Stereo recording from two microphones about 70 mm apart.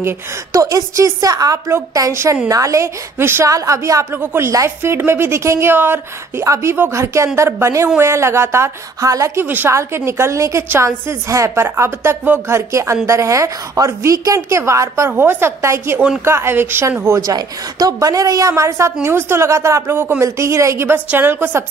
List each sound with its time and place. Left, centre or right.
0.5 s a woman's voice: right
3.4 s a woman's voice: right
4.1 s a woman's voice: right
6.4 s a woman's voice: right
9.0 s a woman's voice: right
9.4 s a woman's voice: right
9.7 s a woman's voice: right
15.1 s a woman's voice: right
17.0 s a woman's voice: right
17.4 s a woman's voice: right